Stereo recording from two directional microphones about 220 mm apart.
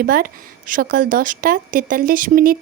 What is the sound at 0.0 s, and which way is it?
A woman's voice, 40° right (ahead or behind).